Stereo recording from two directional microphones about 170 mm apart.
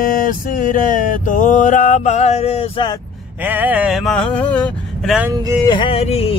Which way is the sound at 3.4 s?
10° right (ahead or behind).